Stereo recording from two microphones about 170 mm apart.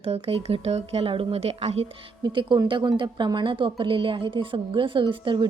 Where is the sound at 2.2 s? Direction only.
25° right (ahead or behind).